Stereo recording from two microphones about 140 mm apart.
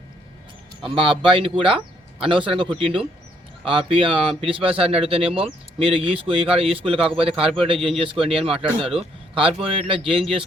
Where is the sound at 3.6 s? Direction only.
40° right (ahead or behind).